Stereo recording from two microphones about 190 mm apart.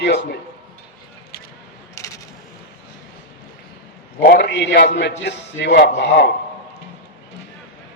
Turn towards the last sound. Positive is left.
turn(degrees=65)  # may be behind; listen again after turning